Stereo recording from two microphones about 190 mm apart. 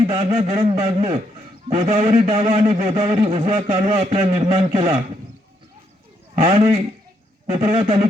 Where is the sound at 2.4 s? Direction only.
30° right (ahead or behind).